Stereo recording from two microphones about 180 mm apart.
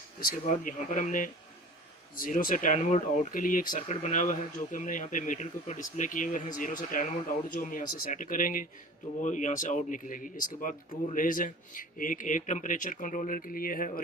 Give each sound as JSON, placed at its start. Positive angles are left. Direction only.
{"t": 0.3, "sound": "speech", "side_deg": 45}